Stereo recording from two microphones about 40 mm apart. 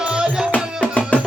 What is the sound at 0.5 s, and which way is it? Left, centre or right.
Music, left.